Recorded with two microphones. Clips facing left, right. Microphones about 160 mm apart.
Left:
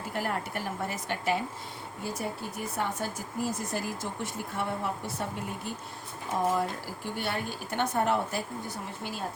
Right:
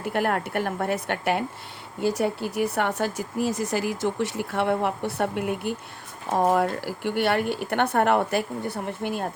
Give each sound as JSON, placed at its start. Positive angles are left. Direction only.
{"t": 0.0, "sound": "a woman's voice", "side_deg": -65}
{"t": 2.0, "sound": "speech", "side_deg": -75}